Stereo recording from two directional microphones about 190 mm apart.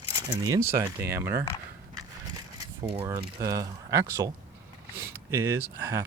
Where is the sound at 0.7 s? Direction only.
15° right (ahead or behind).